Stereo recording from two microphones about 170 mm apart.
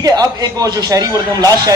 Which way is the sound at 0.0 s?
20° right (ahead or behind).